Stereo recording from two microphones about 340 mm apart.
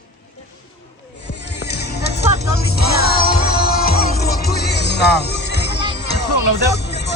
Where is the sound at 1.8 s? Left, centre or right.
Left.